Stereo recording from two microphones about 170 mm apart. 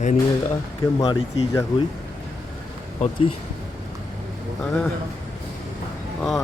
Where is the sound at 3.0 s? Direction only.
30° left (ahead or behind).